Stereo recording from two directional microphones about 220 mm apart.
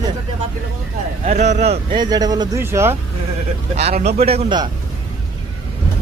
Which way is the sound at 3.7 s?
30° right (ahead or behind).